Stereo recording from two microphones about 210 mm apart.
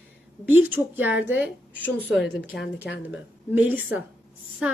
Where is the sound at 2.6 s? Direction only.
50° left (ahead or behind).